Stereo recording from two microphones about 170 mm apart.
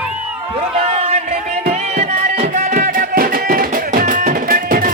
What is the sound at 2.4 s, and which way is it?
Music, 60° right (ahead or behind).